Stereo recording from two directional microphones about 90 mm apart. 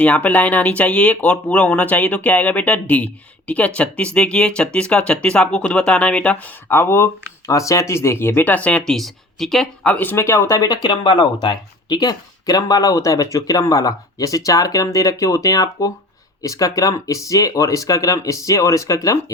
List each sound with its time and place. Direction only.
0.0 s speech: 15° left (ahead or behind)
6.7 s speech: 25° left (ahead or behind); by 9.6 s 5° left (ahead or behind)
9.8 s speech: 20° left (ahead or behind); by 10.8 s 40° left (ahead or behind)
10.8 s speech: 60° left (ahead or behind); by 19.2 s 35° left (ahead or behind)